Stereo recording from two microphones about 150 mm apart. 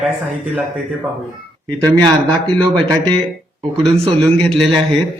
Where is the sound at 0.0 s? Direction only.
10° right (ahead or behind).